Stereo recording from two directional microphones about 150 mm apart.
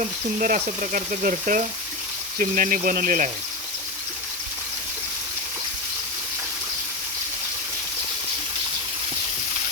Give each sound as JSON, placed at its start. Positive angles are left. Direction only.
{"t": 0.3, "sound": "speech", "side_deg": -60}